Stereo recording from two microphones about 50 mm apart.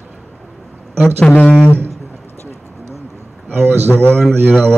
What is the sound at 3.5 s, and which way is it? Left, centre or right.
Speech, right.